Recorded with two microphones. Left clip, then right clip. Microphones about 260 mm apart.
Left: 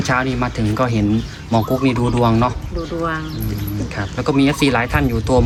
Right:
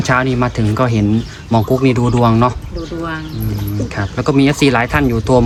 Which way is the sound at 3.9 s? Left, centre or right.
Right.